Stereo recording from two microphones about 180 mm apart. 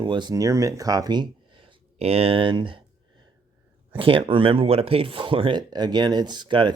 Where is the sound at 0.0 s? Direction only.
25° right (ahead or behind).